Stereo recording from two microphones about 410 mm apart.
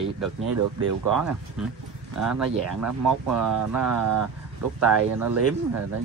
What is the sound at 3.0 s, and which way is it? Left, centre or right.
Speech, right.